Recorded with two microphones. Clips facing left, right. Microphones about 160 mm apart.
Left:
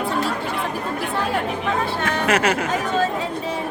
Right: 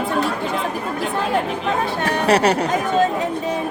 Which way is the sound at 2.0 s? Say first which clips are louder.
Right 5 dB; 35° right (ahead or behind).